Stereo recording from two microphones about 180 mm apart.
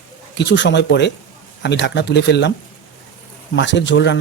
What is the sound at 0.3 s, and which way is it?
Speech, 80° left.